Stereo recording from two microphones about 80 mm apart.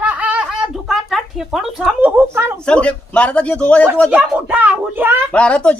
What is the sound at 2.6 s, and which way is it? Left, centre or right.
A man's voice, centre.